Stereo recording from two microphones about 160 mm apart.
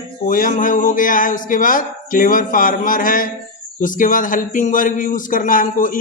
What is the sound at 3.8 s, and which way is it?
Speech, 55° left (ahead or behind).